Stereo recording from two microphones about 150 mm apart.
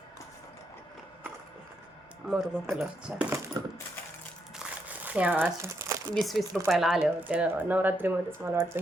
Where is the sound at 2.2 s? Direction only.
5° right (ahead or behind).